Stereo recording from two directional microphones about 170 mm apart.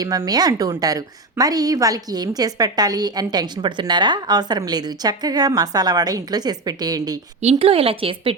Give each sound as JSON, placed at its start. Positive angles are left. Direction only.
{"t": 0.0, "sound": "a woman's voice", "side_deg": -20}
{"t": 7.4, "sound": "a woman's voice", "side_deg": -35}